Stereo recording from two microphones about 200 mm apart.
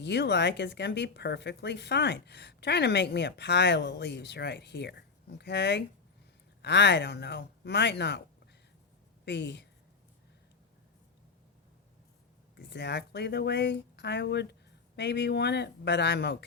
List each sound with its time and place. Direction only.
0.0 s speech: 60° left (ahead or behind)
9.2 s speech: 60° left (ahead or behind)
12.5 s speech: 55° left (ahead or behind)